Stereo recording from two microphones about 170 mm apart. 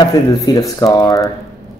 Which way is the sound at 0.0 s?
25° left (ahead or behind).